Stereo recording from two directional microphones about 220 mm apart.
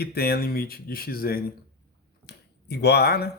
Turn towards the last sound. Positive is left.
turn(degrees=45)  # may be behind; listen again after turning